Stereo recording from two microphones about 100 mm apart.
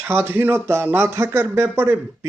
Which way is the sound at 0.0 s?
25° right (ahead or behind).